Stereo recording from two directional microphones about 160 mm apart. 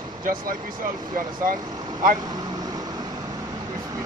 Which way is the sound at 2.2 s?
25° right (ahead or behind).